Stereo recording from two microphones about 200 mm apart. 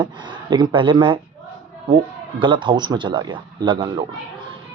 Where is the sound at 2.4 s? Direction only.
25° right (ahead or behind).